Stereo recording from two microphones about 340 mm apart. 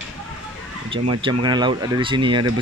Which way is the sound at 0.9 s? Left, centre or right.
Centre.